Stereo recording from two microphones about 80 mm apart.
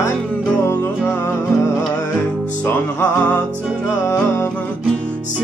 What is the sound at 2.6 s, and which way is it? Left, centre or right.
Music, centre.